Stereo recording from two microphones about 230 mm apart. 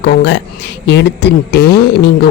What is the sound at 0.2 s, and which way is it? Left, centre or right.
A woman's voice, left.